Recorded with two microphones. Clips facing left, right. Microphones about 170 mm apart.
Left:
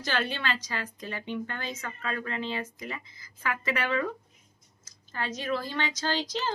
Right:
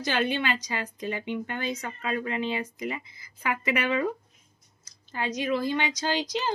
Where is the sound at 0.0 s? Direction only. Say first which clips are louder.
Right 4 dB; 15° right (ahead or behind).